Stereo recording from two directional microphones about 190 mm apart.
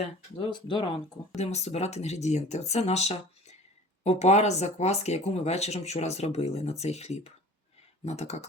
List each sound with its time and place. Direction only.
0.4 s speech: 25° left (ahead or behind)